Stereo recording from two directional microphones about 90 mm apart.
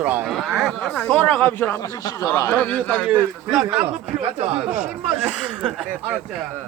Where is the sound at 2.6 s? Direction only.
15° left (ahead or behind).